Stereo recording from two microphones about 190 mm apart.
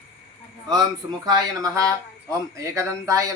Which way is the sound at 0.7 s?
20° right (ahead or behind).